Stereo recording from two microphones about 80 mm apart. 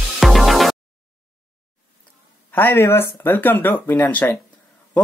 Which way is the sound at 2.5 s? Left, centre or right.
Left.